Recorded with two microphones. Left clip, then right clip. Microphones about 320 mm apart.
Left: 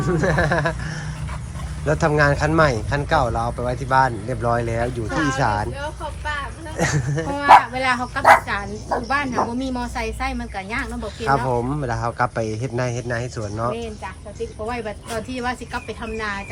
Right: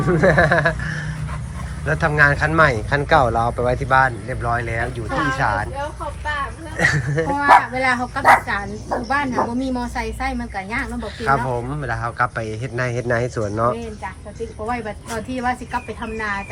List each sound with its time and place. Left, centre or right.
0.0 s speech: centre
6.7 s a woman's voice: centre
7.1 s speech: centre
11.5 s speech: centre